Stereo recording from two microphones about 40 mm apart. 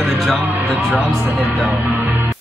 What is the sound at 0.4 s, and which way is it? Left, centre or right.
Speech, right.